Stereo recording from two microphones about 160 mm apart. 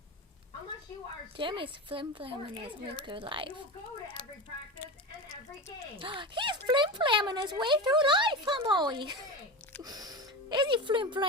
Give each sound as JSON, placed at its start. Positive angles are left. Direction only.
{"t": 1.4, "sound": "speech", "side_deg": -35}
{"t": 6.0, "sound": "speech", "side_deg": -30}